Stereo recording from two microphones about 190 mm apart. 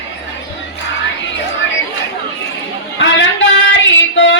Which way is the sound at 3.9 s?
75° left (ahead or behind).